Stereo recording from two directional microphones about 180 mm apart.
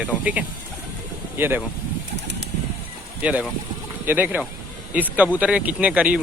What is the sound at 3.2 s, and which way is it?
Speech, 10° right (ahead or behind).